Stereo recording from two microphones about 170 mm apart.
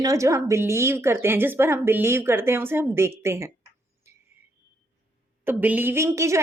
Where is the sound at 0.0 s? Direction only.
20° right (ahead or behind).